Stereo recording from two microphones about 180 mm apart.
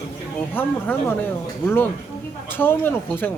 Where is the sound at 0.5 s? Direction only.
10° left (ahead or behind).